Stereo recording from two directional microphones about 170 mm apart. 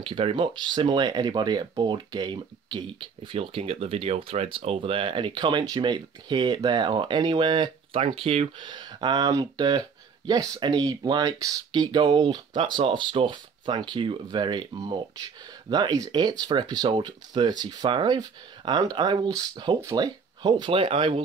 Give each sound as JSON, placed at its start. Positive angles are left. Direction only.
{"t": 0.0, "sound": "speech", "side_deg": -30}